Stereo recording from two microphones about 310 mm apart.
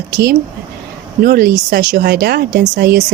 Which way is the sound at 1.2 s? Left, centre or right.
Right.